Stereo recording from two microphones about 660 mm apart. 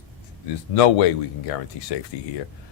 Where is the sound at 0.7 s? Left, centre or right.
Left.